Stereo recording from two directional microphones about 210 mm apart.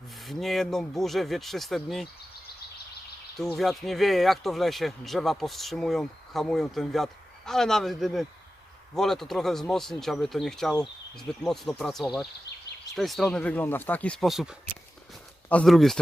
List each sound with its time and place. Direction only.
0.3 s speech: centre (ahead or behind)
3.3 s speech: centre (ahead or behind)
12.5 s a sound: 55° left (ahead or behind)
13.0 s speech: centre (ahead or behind)